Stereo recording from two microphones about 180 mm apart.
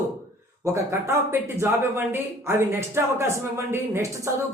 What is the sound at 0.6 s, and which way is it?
Speech, 15° right (ahead or behind).